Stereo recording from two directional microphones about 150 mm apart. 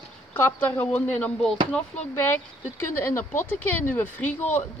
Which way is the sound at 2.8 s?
15° left (ahead or behind).